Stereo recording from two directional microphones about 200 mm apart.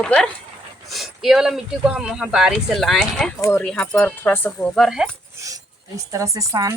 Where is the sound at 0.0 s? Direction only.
5° left (ahead or behind).